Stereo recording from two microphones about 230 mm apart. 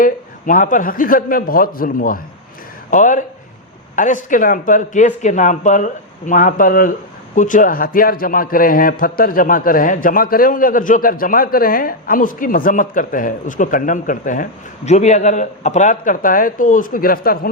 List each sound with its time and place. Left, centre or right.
0.0 s a man's voice: left